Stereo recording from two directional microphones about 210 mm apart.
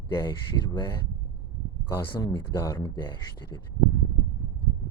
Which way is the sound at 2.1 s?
20° left (ahead or behind).